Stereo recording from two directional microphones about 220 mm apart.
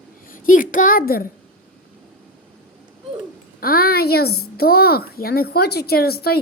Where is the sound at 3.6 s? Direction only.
40° left (ahead or behind).